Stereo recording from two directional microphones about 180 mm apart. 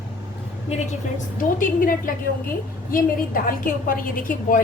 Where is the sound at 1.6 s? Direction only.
50° left (ahead or behind).